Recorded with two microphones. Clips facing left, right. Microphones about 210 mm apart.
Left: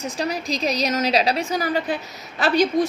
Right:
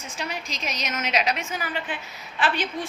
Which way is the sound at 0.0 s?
35° left (ahead or behind).